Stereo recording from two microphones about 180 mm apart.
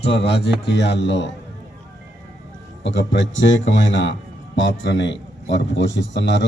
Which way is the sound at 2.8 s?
90° left.